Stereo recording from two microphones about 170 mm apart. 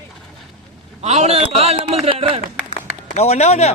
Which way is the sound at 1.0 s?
40° right (ahead or behind).